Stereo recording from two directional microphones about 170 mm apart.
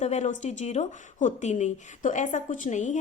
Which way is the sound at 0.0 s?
45° left (ahead or behind).